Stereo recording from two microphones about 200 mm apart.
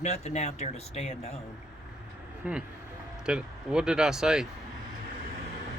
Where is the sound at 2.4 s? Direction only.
5° right (ahead or behind).